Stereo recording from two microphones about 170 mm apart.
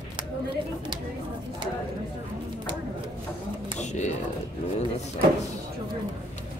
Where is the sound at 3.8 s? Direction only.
45° left (ahead or behind).